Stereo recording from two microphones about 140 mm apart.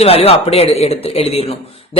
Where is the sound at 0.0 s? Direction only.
45° left (ahead or behind).